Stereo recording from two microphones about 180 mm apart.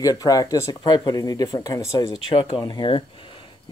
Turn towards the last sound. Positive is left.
turn(degrees=25)  # may be behind; listen again after turning